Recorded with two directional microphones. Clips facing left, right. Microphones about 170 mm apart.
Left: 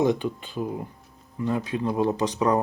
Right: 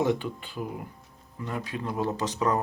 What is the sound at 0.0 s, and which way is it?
Speech, 20° left (ahead or behind).